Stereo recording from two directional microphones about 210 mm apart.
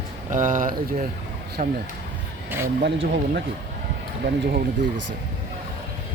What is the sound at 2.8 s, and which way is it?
Speech, 50° right (ahead or behind).